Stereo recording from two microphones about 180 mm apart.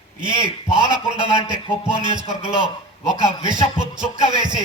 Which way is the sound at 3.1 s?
25° right (ahead or behind).